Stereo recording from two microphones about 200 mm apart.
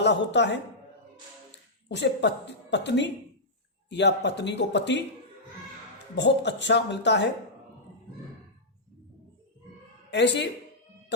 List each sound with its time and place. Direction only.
0.0 s speech: 60° left (ahead or behind)
1.9 s speech: 60° left (ahead or behind)
6.1 s speech: 60° left (ahead or behind)
10.1 s speech: 60° left (ahead or behind)